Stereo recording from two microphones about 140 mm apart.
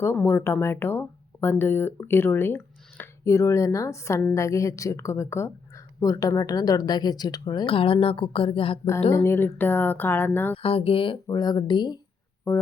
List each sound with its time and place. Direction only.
0.0 s speech: 15° left (ahead or behind); by 8.9 s 40° left (ahead or behind)
9.1 s speech: 20° left (ahead or behind)
10.6 s speech: 45° left (ahead or behind)
11.3 s speech: 30° left (ahead or behind)
12.5 s speech: 20° left (ahead or behind)